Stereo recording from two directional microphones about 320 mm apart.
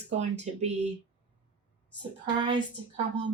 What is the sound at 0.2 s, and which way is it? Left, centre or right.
Speech, centre.